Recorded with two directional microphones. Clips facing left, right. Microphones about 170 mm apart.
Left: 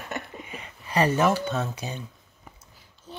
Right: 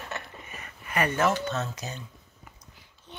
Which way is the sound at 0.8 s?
30° left (ahead or behind).